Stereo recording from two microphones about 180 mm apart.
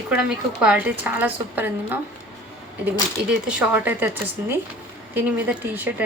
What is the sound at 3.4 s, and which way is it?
Speech, 5° right (ahead or behind).